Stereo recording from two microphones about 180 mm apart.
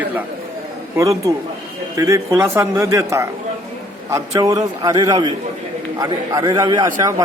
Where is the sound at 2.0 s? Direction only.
15° right (ahead or behind).